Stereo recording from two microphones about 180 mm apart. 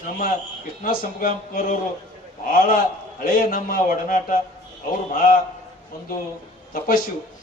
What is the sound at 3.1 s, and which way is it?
Speech, 50° left (ahead or behind).